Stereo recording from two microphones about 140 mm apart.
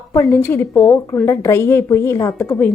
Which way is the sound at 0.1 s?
20° left (ahead or behind).